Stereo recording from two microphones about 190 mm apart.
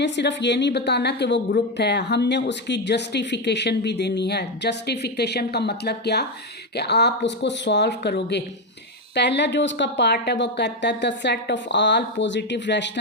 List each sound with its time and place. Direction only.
0.0 s a woman's voice: 65° left (ahead or behind)